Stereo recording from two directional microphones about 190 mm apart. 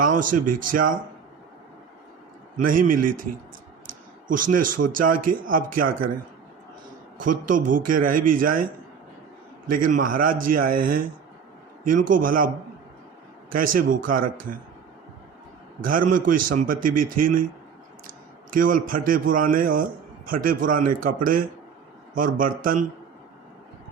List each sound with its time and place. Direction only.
0.0 s a man's voice: 45° right (ahead or behind)
2.6 s a man's voice: 45° right (ahead or behind)
7.2 s a man's voice: 45° right (ahead or behind)
9.7 s a man's voice: 45° right (ahead or behind)
13.5 s a man's voice: 45° right (ahead or behind)
15.8 s a man's voice: 45° right (ahead or behind)
18.5 s a man's voice: 45° right (ahead or behind)